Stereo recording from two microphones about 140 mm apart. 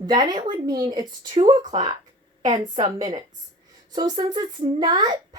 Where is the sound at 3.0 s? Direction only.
30° right (ahead or behind).